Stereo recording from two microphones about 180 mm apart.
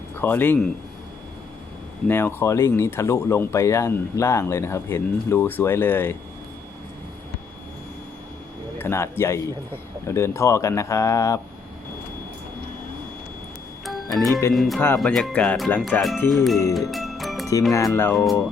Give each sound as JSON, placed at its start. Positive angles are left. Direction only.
{"t": 0.2, "sound": "speech", "side_deg": 10}
{"t": 2.0, "sound": "speech", "side_deg": 15}
{"t": 8.8, "sound": "speech", "side_deg": 15}
{"t": 14.2, "sound": "speech", "side_deg": 0}
{"t": 16.9, "sound": "music", "side_deg": 0}
{"t": 17.7, "sound": "speech", "side_deg": 15}